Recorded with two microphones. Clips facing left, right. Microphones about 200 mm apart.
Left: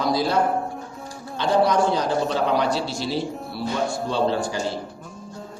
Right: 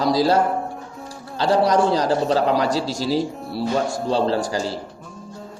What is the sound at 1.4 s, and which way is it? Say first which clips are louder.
A man's voice: right 2 dB; 40° right (ahead or behind).